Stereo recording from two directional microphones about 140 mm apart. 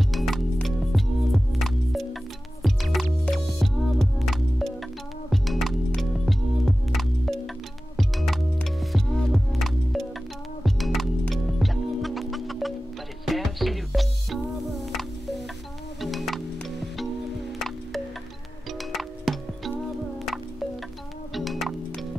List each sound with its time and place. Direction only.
0.1 s music: centre (ahead or behind)
21.3 s music: centre (ahead or behind)